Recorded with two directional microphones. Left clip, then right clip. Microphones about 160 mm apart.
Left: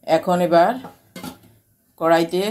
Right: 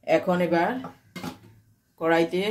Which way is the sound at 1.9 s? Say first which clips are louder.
Left 5 dB; 25° left (ahead or behind).